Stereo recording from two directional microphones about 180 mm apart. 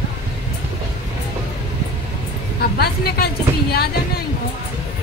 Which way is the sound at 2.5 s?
60° left (ahead or behind).